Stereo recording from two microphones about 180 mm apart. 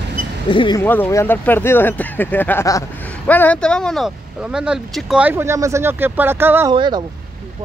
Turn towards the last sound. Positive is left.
turn(degrees=-25)  # may be behind; listen again after turning